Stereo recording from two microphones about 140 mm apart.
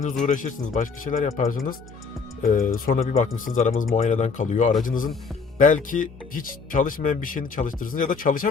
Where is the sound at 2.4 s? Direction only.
80° left.